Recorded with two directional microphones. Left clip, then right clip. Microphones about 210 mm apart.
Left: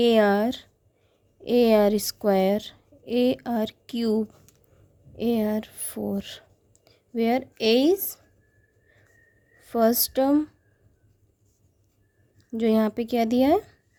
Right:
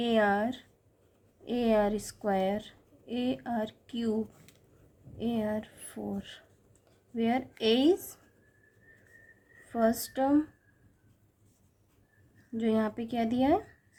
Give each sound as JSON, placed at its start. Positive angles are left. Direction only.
{"t": 0.0, "sound": "a woman's voice", "side_deg": 50}
{"t": 9.6, "sound": "a woman's voice", "side_deg": 45}
{"t": 12.5, "sound": "a woman's voice", "side_deg": 50}